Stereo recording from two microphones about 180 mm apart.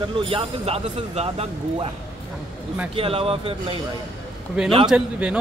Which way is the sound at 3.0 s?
30° right (ahead or behind).